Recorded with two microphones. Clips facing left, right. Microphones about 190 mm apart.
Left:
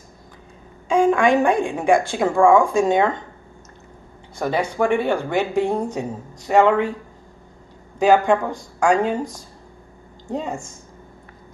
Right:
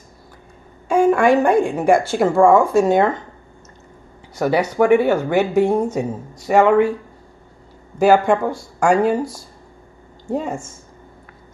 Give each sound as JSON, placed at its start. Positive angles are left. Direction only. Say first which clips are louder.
{"t": 0.8, "sound": "speech", "louder": "right 2 dB", "side_deg": -5}
{"t": 4.4, "sound": "speech", "louder": "right 4 dB", "side_deg": -10}
{"t": 8.0, "sound": "speech", "louder": "right 2 dB", "side_deg": -10}
{"t": 10.3, "sound": "speech", "louder": "right 3 dB", "side_deg": -10}